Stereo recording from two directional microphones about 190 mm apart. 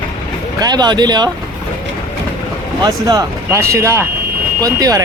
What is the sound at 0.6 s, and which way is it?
Speech, 20° right (ahead or behind).